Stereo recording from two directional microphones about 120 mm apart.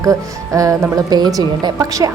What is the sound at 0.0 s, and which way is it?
Speech, 30° right (ahead or behind).